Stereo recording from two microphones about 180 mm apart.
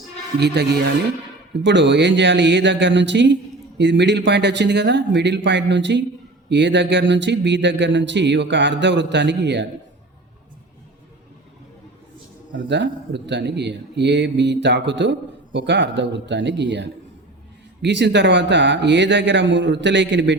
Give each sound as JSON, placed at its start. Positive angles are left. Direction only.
{"t": 0.3, "sound": "speech", "side_deg": -65}
{"t": 1.6, "sound": "speech", "side_deg": -80}
{"t": 12.5, "sound": "speech", "side_deg": -75}